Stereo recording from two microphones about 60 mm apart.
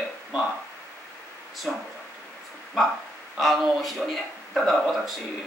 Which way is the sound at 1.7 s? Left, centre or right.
Centre.